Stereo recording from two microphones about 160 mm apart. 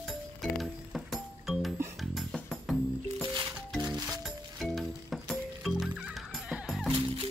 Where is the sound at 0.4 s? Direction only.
Centre (ahead or behind).